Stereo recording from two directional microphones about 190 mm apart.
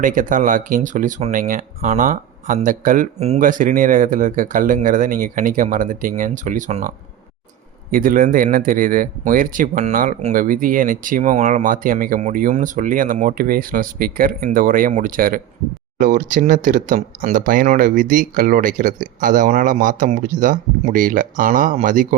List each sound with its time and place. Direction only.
0.0 s speech: 45° right (ahead or behind)